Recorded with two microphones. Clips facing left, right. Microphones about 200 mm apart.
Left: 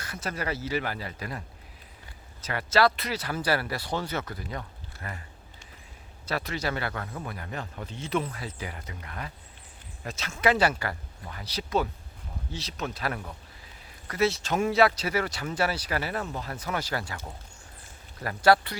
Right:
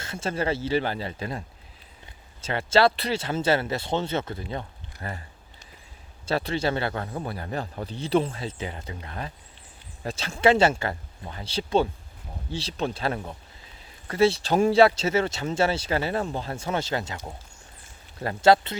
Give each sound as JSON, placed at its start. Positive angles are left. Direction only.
{"t": 0.0, "sound": "speech", "side_deg": -25}
{"t": 6.2, "sound": "speech", "side_deg": -30}